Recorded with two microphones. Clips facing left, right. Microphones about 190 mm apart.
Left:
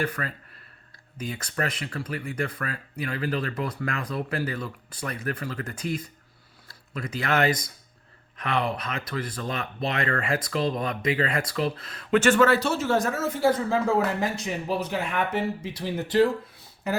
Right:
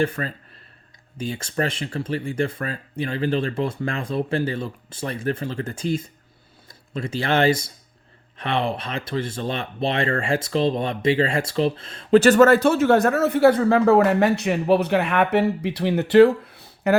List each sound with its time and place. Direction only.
0.0 s speech: 25° right (ahead or behind); by 17.0 s 65° right (ahead or behind)